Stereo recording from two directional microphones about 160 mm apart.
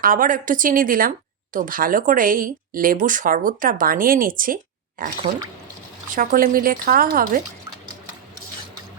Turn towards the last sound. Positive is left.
turn(degrees=-60)  # may be behind; listen again after turning